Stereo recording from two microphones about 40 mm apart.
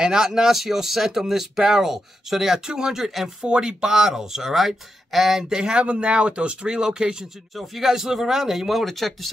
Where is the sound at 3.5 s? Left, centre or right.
Centre.